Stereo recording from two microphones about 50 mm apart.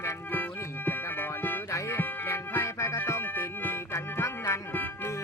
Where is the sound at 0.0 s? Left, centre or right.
Left.